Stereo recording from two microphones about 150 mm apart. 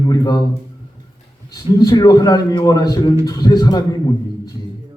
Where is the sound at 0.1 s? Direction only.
25° left (ahead or behind).